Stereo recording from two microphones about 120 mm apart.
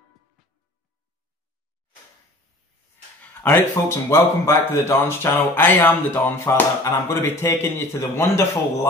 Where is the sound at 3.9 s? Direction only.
20° left (ahead or behind).